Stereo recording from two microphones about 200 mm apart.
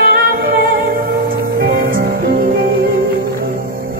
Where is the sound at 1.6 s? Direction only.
45° right (ahead or behind).